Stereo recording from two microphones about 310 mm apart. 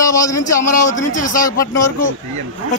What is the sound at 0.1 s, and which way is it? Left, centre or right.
Speech, centre.